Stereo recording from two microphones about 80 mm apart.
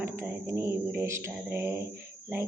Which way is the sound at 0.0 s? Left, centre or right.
Right.